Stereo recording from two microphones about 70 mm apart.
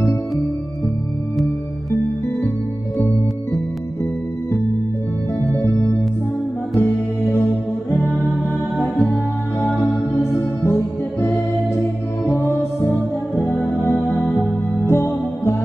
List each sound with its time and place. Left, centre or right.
6.8 s music: left
8.8 s music: left
14.7 s music: left